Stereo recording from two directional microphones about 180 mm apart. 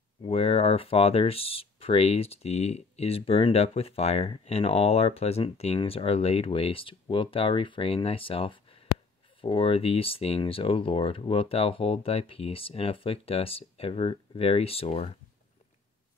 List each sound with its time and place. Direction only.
0.2 s speech: 35° left (ahead or behind)